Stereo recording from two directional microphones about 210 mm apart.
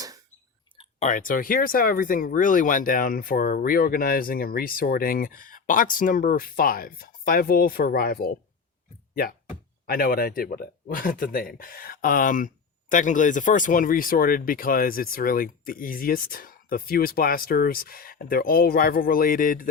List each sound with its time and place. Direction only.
0.8 s speech: 35° left (ahead or behind)
9.8 s speech: 45° left (ahead or behind)